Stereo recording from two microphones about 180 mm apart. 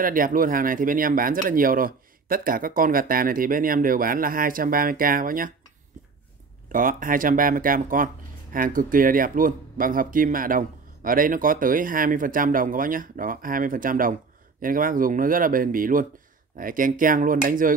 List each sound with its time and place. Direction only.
0.0 s speech: 50° right (ahead or behind)
6.7 s speech: 50° right (ahead or behind)